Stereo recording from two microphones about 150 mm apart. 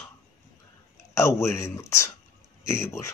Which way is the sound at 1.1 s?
20° left (ahead or behind).